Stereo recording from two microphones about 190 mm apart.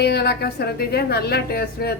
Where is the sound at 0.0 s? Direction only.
60° left (ahead or behind).